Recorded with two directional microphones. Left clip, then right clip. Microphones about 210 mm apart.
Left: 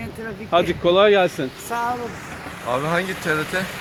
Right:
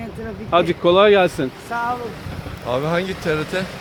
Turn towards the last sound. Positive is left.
turn(degrees=-35)  # may be behind; listen again after turning